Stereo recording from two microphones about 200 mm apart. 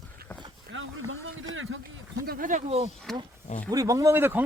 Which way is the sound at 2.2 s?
45° right (ahead or behind).